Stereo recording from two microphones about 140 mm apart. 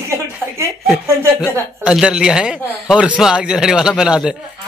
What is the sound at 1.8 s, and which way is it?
A man's voice, 5° right (ahead or behind).